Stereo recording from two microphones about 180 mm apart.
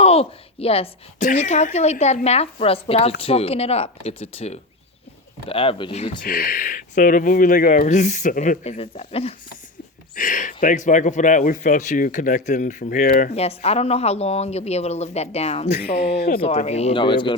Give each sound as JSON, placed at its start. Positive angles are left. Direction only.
{"t": 0.0, "sound": "a woman's voice", "side_deg": 35}
{"t": 6.2, "sound": "speech", "side_deg": 55}
{"t": 10.2, "sound": "speech", "side_deg": 45}
{"t": 13.3, "sound": "a woman's voice", "side_deg": 35}
{"t": 15.8, "sound": "speech", "side_deg": 60}
{"t": 16.4, "sound": "a woman's voice", "side_deg": 35}